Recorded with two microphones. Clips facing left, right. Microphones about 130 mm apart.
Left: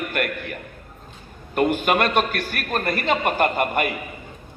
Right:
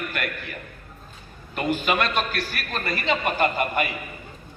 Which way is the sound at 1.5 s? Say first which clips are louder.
Left 4 dB; 55° left (ahead or behind).